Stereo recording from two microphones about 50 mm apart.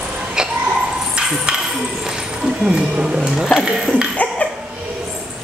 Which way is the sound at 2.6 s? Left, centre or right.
Centre.